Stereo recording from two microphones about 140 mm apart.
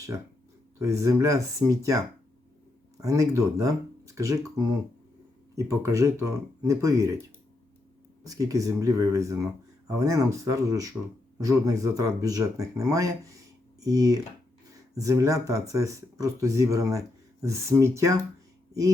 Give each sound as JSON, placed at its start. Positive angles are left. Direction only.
{"t": 0.8, "sound": "speech", "side_deg": -20}
{"t": 5.5, "sound": "speech", "side_deg": -20}